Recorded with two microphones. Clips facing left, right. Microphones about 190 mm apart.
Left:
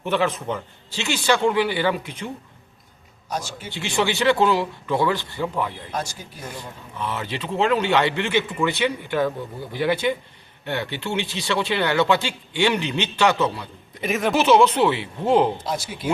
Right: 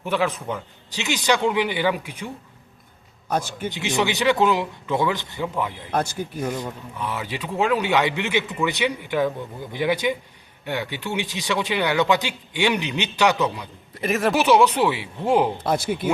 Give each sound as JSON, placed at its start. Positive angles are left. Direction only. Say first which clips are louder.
{"t": 0.0, "sound": "speech", "louder": "left 1 dB", "side_deg": -10}
{"t": 3.2, "sound": "a man's voice", "louder": "right 5 dB", "side_deg": -55}
{"t": 3.7, "sound": "speech", "louder": "even", "side_deg": -20}
{"t": 5.9, "sound": "a man's voice", "louder": "right 5 dB", "side_deg": -60}
{"t": 7.0, "sound": "speech", "louder": "left 1 dB", "side_deg": -10}
{"t": 14.0, "sound": "speech", "louder": "right 1 dB", "side_deg": 0}
{"t": 14.3, "sound": "speech", "louder": "left 2 dB", "side_deg": -15}
{"t": 15.6, "sound": "a man's voice", "louder": "right 6 dB", "side_deg": -55}